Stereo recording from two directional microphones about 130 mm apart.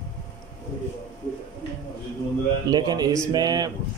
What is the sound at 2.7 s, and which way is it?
A man's voice, 30° right (ahead or behind).